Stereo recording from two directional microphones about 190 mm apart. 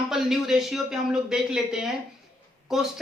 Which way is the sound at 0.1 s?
Centre (ahead or behind).